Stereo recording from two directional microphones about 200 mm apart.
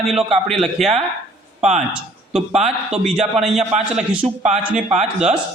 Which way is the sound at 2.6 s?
35° right (ahead or behind).